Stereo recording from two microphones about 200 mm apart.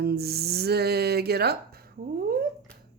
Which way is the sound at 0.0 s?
50° right (ahead or behind).